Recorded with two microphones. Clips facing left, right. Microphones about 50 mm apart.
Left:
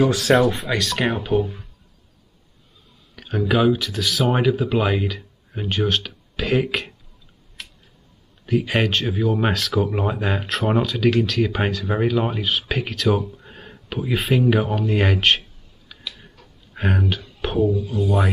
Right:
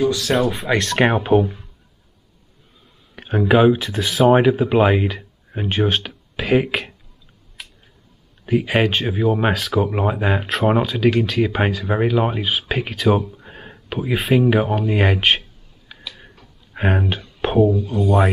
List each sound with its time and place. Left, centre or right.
0.2 s speech: centre
1.2 s speech: centre
3.2 s speech: right
8.5 s speech: centre
16.0 s a sound: centre
16.7 s speech: centre
17.4 s a sound: centre
17.6 s speech: centre